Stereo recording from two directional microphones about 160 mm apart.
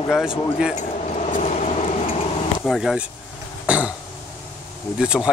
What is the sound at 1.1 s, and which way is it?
Vehicle, 40° left (ahead or behind).